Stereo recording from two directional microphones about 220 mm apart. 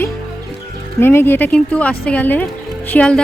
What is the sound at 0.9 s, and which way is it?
Speech, 10° left (ahead or behind).